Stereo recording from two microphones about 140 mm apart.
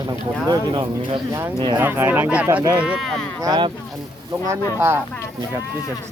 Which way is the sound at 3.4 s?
30° right (ahead or behind).